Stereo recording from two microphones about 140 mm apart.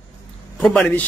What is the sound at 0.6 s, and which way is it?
Speech, 10° left (ahead or behind).